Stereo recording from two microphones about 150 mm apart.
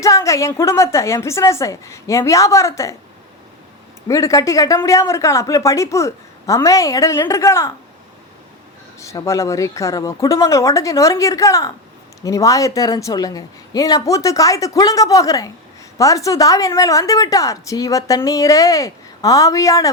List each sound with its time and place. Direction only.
0.0 s a woman's voice: 20° left (ahead or behind)
4.1 s a woman's voice: 20° left (ahead or behind)
9.0 s a woman's voice: 20° left (ahead or behind)